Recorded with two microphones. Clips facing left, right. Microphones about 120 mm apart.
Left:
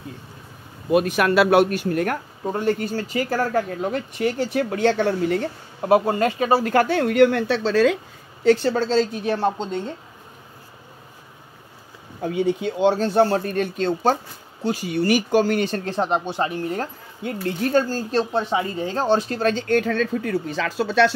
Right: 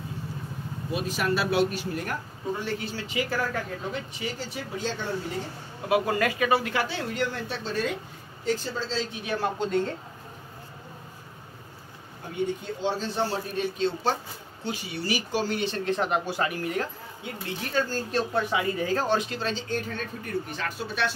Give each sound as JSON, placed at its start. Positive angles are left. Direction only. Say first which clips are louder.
{"t": 0.9, "sound": "speech", "louder": "left 10 dB", "side_deg": 65}
{"t": 5.8, "sound": "speech", "louder": "left 7 dB", "side_deg": 40}
{"t": 6.0, "sound": "speech", "louder": "left 5 dB", "side_deg": 30}
{"t": 8.5, "sound": "speech", "louder": "left 11 dB", "side_deg": 75}
{"t": 9.2, "sound": "speech", "louder": "left 6 dB", "side_deg": 30}
{"t": 12.3, "sound": "speech", "louder": "left 8 dB", "side_deg": 90}
{"t": 14.6, "sound": "speech", "louder": "left 10 dB", "side_deg": 45}
{"t": 17.2, "sound": "speech", "louder": "left 11 dB", "side_deg": 55}
{"t": 18.3, "sound": "speech", "louder": "left 4 dB", "side_deg": 30}
{"t": 19.4, "sound": "speech", "louder": "left 10 dB", "side_deg": 55}
{"t": 19.8, "sound": "speech", "louder": "left 12 dB", "side_deg": 90}